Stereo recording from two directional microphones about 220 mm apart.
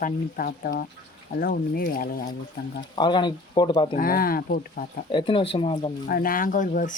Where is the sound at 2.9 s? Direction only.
20° left (ahead or behind).